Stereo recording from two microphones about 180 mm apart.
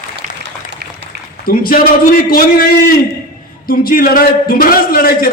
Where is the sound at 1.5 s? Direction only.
50° left (ahead or behind).